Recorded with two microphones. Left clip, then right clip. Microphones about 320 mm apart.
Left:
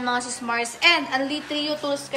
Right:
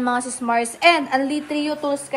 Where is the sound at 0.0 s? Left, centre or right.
Centre.